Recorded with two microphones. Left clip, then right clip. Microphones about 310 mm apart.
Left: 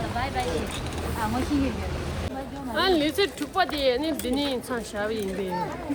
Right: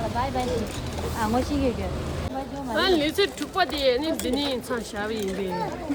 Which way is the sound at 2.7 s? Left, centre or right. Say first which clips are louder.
Right 1 dB; centre.